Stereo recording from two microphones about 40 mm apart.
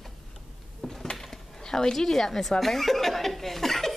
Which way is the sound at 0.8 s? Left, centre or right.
Centre.